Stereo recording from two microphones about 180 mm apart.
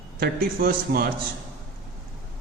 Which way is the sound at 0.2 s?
55° right (ahead or behind).